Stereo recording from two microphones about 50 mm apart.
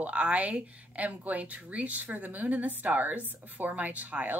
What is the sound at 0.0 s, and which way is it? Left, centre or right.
Speech, right.